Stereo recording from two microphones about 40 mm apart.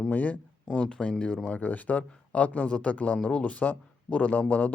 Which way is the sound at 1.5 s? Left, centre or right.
Left.